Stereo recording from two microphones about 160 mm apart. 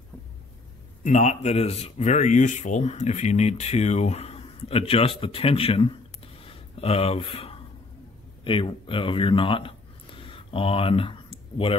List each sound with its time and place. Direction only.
1.0 s speech: 45° left (ahead or behind)